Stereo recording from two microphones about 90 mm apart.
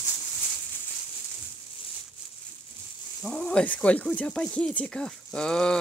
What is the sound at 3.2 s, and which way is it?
Speech, 5° left (ahead or behind).